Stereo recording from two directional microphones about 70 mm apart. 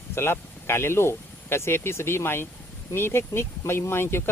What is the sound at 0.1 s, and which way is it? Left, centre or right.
Speech, left.